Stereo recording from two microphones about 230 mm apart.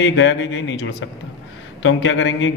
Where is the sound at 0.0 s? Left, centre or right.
Left.